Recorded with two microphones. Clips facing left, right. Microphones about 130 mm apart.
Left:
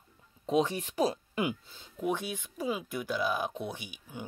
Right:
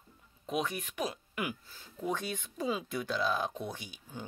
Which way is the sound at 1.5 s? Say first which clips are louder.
Left 5 dB; 20° left (ahead or behind).